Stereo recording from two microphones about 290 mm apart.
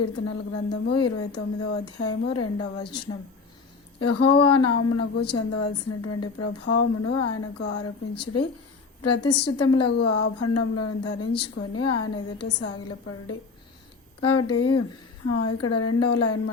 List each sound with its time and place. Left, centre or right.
0.0 s a woman's voice: left
4.0 s a woman's voice: left